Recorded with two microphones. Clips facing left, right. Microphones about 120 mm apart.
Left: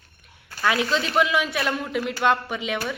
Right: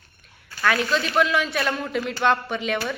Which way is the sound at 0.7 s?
25° left (ahead or behind).